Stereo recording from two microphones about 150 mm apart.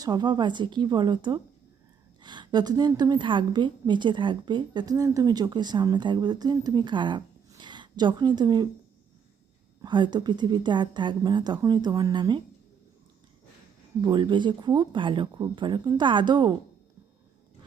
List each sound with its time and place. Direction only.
0.0 s a woman's voice: 25° right (ahead or behind)
9.8 s a woman's voice: 30° right (ahead or behind)
14.0 s speech: 30° right (ahead or behind)